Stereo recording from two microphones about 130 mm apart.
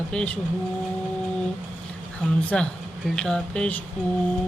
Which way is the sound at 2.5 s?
5° left (ahead or behind).